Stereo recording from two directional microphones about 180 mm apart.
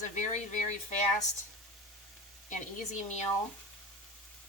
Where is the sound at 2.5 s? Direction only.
40° left (ahead or behind).